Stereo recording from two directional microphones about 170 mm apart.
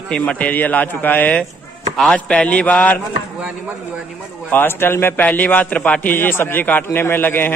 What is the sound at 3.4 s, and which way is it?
Speech, 5° right (ahead or behind).